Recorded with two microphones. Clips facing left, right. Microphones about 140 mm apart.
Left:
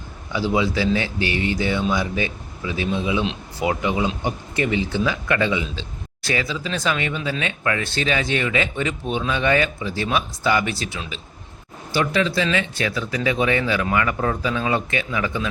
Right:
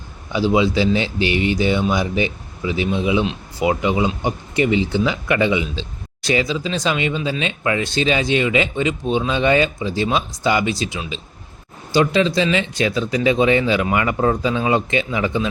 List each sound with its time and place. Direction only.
0.3 s speech: 20° right (ahead or behind)